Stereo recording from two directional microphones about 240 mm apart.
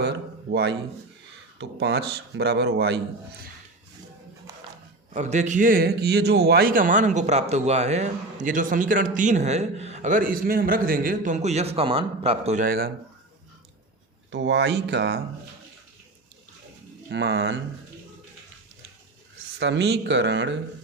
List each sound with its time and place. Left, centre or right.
0.0 s a sound: right
1.5 s speech: right
5.1 s speech: right
14.3 s speech: right
17.1 s speech: right
19.5 s speech: right